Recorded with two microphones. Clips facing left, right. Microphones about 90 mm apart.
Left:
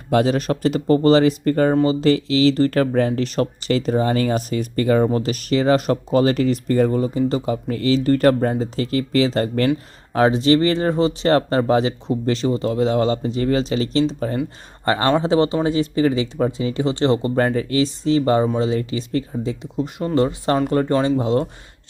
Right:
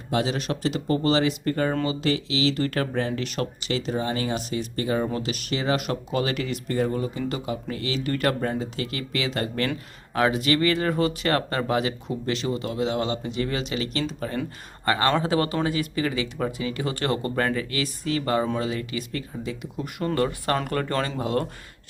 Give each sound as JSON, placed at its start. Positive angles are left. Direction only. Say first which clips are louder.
{"t": 0.1, "sound": "speech", "louder": "left 8 dB", "side_deg": 50}
{"t": 5.1, "sound": "speech", "louder": "left 8 dB", "side_deg": 40}